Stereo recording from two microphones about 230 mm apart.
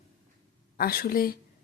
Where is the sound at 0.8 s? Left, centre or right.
Left.